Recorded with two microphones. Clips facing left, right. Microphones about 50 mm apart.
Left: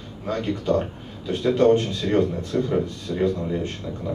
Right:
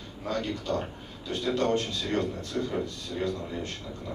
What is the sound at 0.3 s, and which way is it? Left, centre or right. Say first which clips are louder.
A man's voice: left 7 dB; left.